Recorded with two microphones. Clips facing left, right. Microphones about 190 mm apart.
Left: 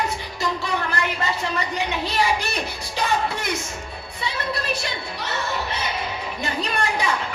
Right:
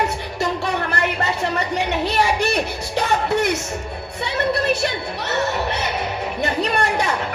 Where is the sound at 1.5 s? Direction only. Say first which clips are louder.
Right 4 dB; 65° right (ahead or behind).